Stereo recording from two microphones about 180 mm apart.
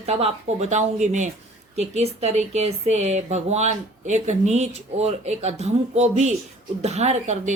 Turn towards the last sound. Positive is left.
turn(degrees=-40)  # may be behind; listen again after turning